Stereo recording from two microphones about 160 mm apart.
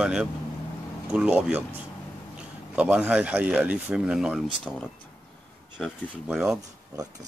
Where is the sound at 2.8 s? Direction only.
10° right (ahead or behind).